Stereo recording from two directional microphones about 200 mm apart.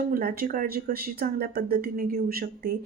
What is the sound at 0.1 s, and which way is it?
A woman's voice, 50° right (ahead or behind).